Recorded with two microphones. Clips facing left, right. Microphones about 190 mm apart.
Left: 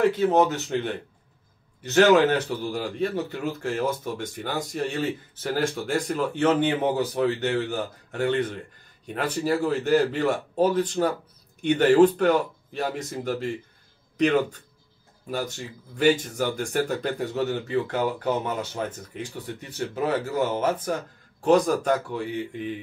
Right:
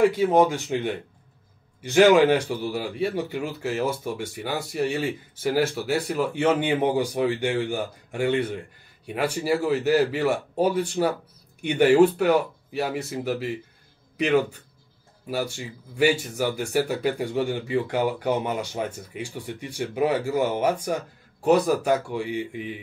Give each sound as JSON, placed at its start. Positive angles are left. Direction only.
{"t": 0.0, "sound": "speech", "side_deg": -10}